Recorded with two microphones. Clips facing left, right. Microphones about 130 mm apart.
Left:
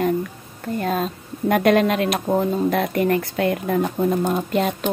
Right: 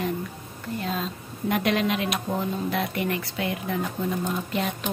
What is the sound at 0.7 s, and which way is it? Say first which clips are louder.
A woman's voice: left 7 dB; 50° left (ahead or behind).